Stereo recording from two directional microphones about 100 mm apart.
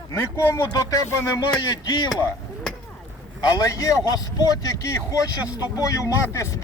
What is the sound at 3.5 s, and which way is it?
A man's voice, 35° left (ahead or behind).